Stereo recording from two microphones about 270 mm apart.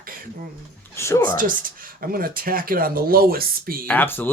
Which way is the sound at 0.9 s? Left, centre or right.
Centre.